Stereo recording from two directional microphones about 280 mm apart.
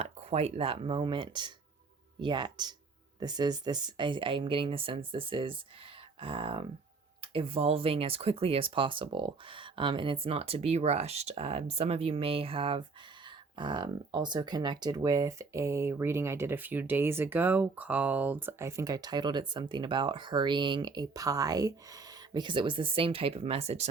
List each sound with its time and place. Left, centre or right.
0.0 s speech: right